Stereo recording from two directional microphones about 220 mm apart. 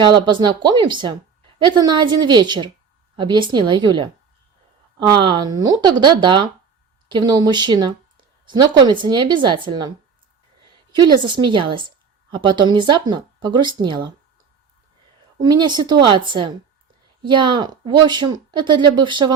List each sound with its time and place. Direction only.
0.0 s speech: 20° right (ahead or behind)
10.9 s speech: 20° right (ahead or behind)
15.4 s speech: 20° right (ahead or behind)